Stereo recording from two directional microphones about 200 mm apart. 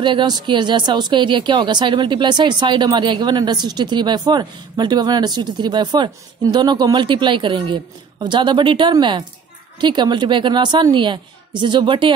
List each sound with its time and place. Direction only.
0.0 s speech: 25° right (ahead or behind)